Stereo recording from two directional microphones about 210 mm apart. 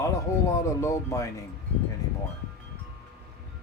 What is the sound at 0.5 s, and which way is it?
Speech, 15° left (ahead or behind).